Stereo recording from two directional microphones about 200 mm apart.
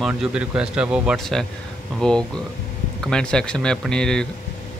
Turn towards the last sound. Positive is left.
turn(degrees=5)  # may be behind; listen again after turning